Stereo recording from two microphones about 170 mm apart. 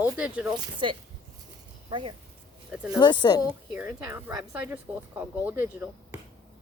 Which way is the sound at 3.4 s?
10° right (ahead or behind).